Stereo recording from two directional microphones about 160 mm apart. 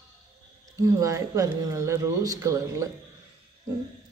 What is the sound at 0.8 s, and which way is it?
Speech, 20° right (ahead or behind).